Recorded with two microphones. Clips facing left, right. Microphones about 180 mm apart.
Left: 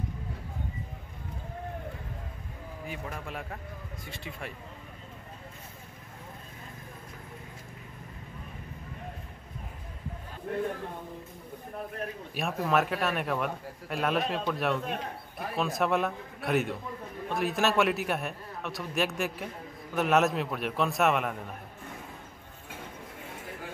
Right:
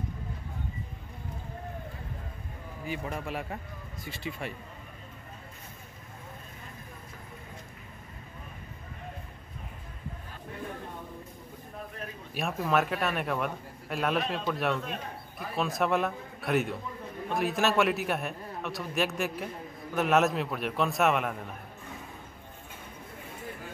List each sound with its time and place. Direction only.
2.9 s a man's voice: centre (ahead or behind)
10.5 s a sound: 70° left (ahead or behind)
12.4 s a man's voice: centre (ahead or behind)